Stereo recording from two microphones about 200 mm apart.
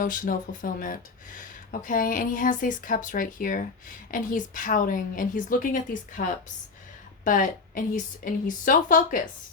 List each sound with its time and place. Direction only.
0.0 s a woman's voice: 45° left (ahead or behind)
7.3 s a woman's voice: 40° left (ahead or behind)